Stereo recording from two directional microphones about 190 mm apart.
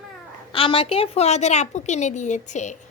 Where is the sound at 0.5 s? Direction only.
30° left (ahead or behind).